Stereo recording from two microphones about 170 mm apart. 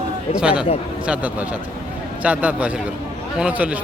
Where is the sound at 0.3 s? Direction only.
5° right (ahead or behind).